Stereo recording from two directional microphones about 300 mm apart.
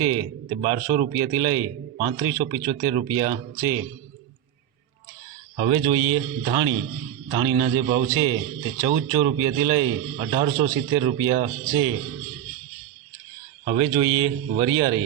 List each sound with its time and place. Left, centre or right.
0.0 s a man's voice: centre
5.5 s a man's voice: centre
13.7 s a man's voice: centre